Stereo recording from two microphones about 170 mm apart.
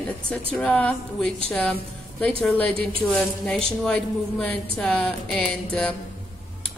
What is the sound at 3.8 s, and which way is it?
A woman's voice, 5° left (ahead or behind).